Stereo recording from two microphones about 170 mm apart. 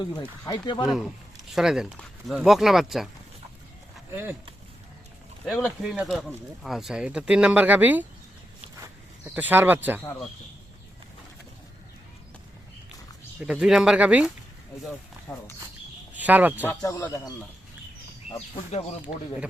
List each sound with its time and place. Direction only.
0.4 s speech: 25° left (ahead or behind)
1.5 s speech: 5° right (ahead or behind)
4.1 s speech: 10° right (ahead or behind)
5.5 s speech: centre (ahead or behind)
8.7 s a sound: 15° right (ahead or behind)
13.4 s speech: 5° right (ahead or behind)
16.1 s speech: 10° right (ahead or behind)
16.6 s speech: 15° left (ahead or behind)
18.3 s speech: 35° left (ahead or behind)